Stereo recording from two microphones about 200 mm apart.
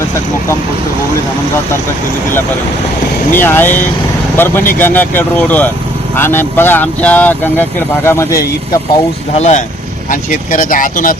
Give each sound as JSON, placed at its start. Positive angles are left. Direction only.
{"t": 3.3, "sound": "speech", "side_deg": 10}
{"t": 9.4, "sound": "speech", "side_deg": 35}